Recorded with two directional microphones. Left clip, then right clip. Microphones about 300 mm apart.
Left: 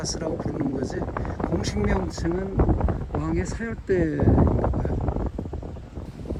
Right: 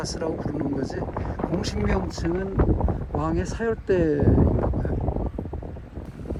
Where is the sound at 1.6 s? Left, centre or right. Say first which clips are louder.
Even; centre.